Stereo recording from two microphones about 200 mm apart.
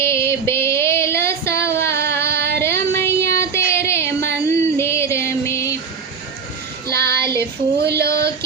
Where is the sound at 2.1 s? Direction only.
15° left (ahead or behind).